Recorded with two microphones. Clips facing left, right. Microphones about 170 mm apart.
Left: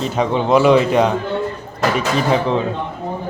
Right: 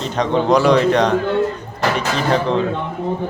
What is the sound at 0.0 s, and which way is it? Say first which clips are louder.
A man's voice: even; 5° left (ahead or behind).